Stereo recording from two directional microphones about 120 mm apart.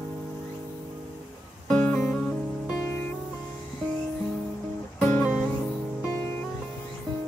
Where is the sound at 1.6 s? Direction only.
5° left (ahead or behind).